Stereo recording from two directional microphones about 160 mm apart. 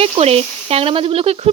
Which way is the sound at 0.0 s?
40° right (ahead or behind).